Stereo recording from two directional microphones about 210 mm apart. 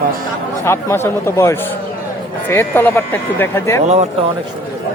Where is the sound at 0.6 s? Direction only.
10° left (ahead or behind).